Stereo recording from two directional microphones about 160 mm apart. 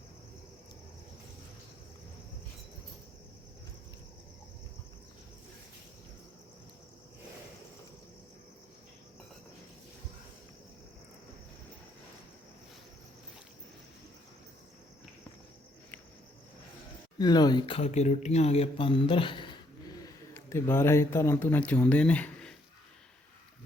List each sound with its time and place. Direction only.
17.2 s speech: 25° left (ahead or behind)
20.3 s speech: 15° left (ahead or behind)